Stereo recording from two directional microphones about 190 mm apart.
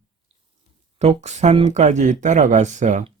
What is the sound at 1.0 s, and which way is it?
Speech, 35° right (ahead or behind).